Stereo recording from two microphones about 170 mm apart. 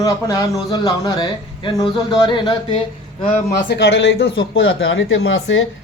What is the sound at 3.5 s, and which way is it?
Speech, 90° left.